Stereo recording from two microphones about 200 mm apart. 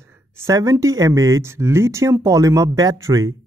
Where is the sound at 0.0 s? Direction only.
15° right (ahead or behind).